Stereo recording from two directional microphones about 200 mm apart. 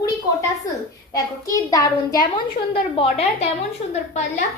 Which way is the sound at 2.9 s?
30° left (ahead or behind).